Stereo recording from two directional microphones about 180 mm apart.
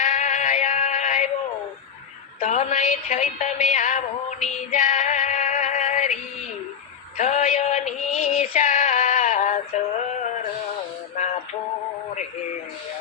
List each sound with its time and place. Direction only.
0.0 s synthetic singing: 45° left (ahead or behind)
2.4 s a sound: 40° left (ahead or behind)
7.2 s music: 40° left (ahead or behind)